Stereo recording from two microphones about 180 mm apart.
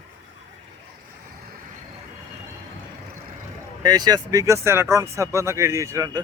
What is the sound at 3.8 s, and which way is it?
Speech, 20° right (ahead or behind).